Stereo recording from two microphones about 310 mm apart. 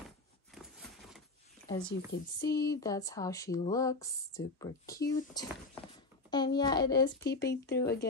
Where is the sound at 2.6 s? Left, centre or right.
Centre.